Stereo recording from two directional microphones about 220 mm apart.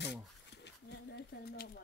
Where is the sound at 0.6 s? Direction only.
50° left (ahead or behind).